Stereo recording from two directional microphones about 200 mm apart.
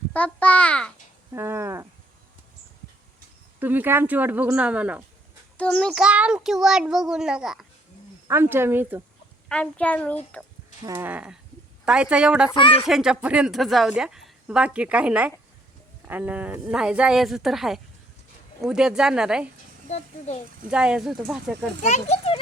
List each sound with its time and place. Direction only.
0.1 s speech: 5° left (ahead or behind)
1.3 s a sound: 10° right (ahead or behind)
3.6 s speech: 10° right (ahead or behind)
5.5 s a woman's voice: 5° left (ahead or behind); by 9.0 s 10° right (ahead or behind)
9.5 s speech: 5° left (ahead or behind)
10.8 s a woman's voice: 10° right (ahead or behind)
12.5 s speech: 25° left (ahead or behind)
12.8 s a woman's voice: 5° right (ahead or behind)
19.9 s a child's voice: 35° left (ahead or behind)
20.7 s a woman's voice: 5° right (ahead or behind)
21.8 s a child's voice: 35° left (ahead or behind)